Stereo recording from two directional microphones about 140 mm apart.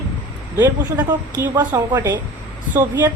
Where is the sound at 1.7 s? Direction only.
20° right (ahead or behind).